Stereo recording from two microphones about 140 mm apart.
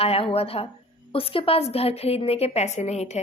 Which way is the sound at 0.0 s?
45° left (ahead or behind).